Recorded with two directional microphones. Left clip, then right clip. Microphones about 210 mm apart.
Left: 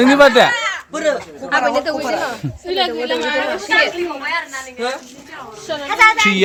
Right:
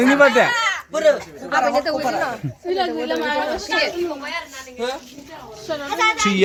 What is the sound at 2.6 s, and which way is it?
Speech, 45° right (ahead or behind).